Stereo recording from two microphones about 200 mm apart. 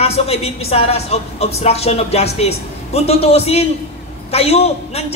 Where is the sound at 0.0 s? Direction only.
30° left (ahead or behind).